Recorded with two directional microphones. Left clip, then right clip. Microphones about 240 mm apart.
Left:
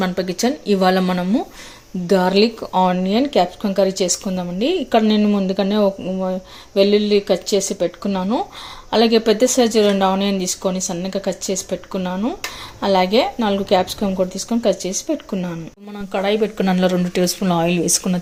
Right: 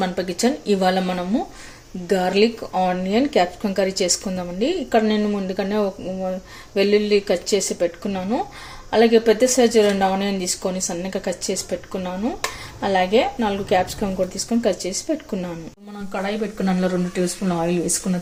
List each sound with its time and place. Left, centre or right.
0.0 s speech: centre
16.1 s speech: left